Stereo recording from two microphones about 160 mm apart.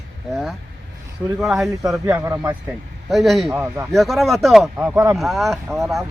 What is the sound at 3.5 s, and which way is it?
Speech, 15° right (ahead or behind).